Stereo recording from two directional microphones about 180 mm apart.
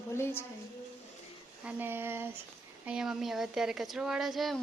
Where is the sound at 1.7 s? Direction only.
10° right (ahead or behind).